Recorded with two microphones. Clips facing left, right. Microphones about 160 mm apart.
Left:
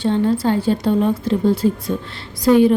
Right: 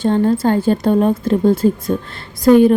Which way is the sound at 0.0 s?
45° right (ahead or behind).